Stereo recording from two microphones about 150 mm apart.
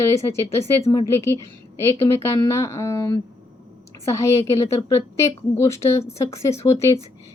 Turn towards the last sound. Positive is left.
turn(degrees=20)  # may be behind; listen again after turning